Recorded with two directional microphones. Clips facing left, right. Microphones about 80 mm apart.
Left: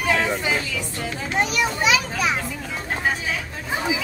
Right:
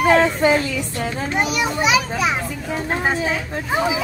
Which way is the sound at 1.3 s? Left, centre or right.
Centre.